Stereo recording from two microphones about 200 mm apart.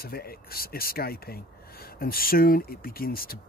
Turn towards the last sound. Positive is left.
turn(degrees=45)  # may be behind; listen again after turning